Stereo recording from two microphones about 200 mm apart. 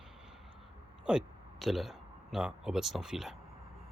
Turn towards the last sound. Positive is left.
turn(degrees=0)  # may be behind; listen again after turning